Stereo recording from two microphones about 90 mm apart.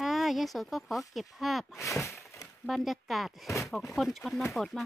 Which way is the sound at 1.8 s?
35° left (ahead or behind).